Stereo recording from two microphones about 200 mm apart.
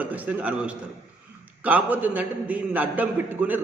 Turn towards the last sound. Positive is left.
turn(degrees=-10)  # may be behind; listen again after turning